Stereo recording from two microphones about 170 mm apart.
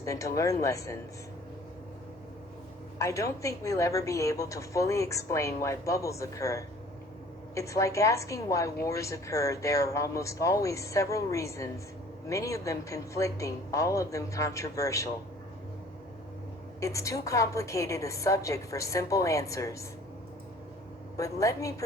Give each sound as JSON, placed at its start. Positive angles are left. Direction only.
{"t": 0.0, "sound": "a woman's voice", "side_deg": 20}
{"t": 3.0, "sound": "a woman's voice", "side_deg": 15}
{"t": 16.8, "sound": "a woman's voice", "side_deg": 20}
{"t": 21.2, "sound": "a woman's voice", "side_deg": 20}